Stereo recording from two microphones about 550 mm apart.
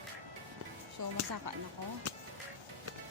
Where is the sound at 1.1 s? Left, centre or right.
Right.